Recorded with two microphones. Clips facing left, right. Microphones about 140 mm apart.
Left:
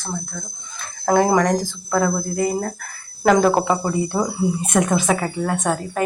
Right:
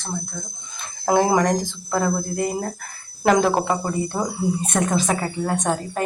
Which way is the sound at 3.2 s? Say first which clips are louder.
Left 2 dB; centre (ahead or behind).